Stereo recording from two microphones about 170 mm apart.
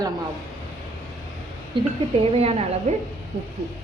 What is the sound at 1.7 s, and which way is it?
Speech, 30° right (ahead or behind).